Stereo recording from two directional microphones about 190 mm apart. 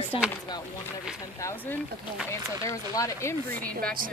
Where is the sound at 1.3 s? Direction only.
15° left (ahead or behind).